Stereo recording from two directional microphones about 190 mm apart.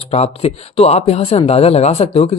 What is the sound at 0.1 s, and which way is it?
Speech, 30° left (ahead or behind).